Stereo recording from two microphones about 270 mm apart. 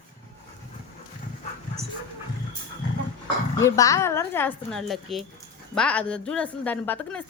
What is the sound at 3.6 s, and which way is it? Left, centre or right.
A woman's voice, centre.